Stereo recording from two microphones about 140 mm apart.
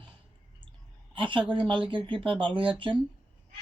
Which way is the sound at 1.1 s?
35° right (ahead or behind).